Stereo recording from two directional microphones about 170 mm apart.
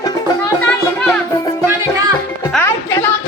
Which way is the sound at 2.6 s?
15° left (ahead or behind).